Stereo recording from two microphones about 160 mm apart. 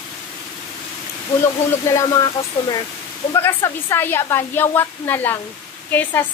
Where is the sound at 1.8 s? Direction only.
20° left (ahead or behind).